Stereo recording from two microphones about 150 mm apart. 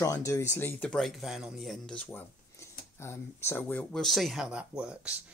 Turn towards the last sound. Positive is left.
turn(degrees=-5)  # may be behind; listen again after turning